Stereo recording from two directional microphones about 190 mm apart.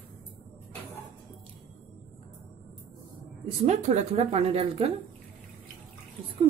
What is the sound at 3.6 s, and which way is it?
Speech, 35° right (ahead or behind).